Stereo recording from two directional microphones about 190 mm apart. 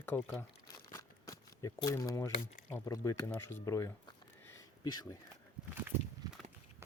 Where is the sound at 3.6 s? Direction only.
15° left (ahead or behind).